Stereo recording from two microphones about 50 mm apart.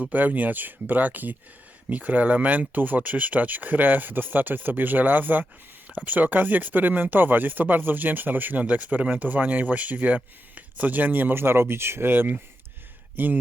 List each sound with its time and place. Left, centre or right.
0.0 s speech: right